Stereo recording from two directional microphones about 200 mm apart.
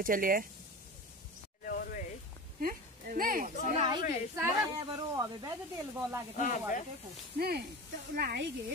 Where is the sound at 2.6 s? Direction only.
45° right (ahead or behind).